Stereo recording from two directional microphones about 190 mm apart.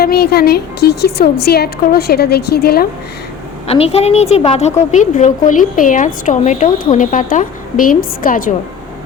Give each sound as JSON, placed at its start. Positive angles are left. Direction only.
{"t": 0.0, "sound": "a woman's voice", "side_deg": 55}
{"t": 3.7, "sound": "a woman's voice", "side_deg": 30}